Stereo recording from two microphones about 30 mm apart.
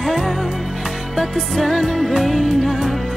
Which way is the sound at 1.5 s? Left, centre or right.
Centre.